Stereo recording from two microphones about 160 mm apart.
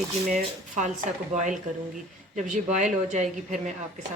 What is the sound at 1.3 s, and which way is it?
Speech, 50° right (ahead or behind).